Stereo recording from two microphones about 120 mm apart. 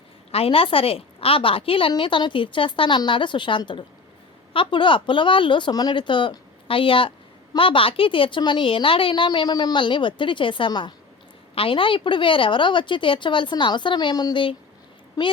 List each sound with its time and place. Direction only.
0.3 s a woman's voice: 55° left (ahead or behind); by 14.5 s 40° left (ahead or behind)